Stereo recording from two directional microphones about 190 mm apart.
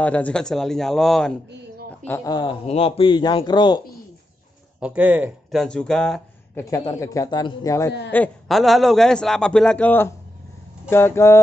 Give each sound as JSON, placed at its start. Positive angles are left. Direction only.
{"t": 0.0, "sound": "a man's voice", "side_deg": 5}
{"t": 2.0, "sound": "a man's voice", "side_deg": 15}
{"t": 4.7, "sound": "speech", "side_deg": -5}
{"t": 5.6, "sound": "a man's voice", "side_deg": 5}
{"t": 6.5, "sound": "a man's voice", "side_deg": 15}
{"t": 8.1, "sound": "a man's voice", "side_deg": 5}